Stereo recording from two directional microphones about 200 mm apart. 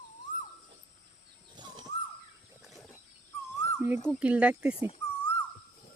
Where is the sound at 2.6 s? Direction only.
Centre (ahead or behind).